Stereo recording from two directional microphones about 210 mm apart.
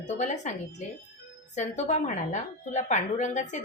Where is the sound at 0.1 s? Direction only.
35° left (ahead or behind).